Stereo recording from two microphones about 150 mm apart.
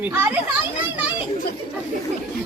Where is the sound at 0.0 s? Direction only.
10° right (ahead or behind).